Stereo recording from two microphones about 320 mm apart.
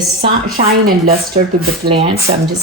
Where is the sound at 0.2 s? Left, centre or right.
Right.